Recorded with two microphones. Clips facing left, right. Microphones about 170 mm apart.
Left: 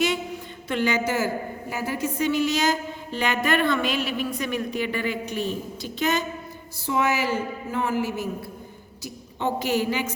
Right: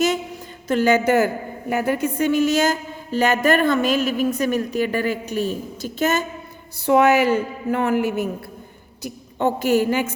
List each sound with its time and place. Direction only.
0.7 s a woman's voice: 45° right (ahead or behind)
6.8 s a woman's voice: 60° right (ahead or behind)